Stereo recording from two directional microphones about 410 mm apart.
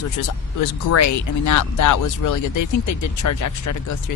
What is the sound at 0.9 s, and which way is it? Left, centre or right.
Speech, left.